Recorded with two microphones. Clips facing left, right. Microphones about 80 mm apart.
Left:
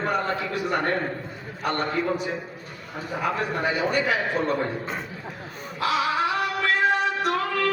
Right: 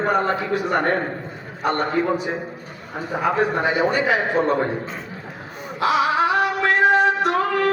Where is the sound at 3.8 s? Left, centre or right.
Right.